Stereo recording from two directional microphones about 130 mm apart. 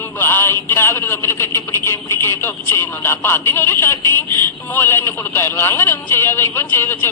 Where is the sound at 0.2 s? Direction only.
15° left (ahead or behind).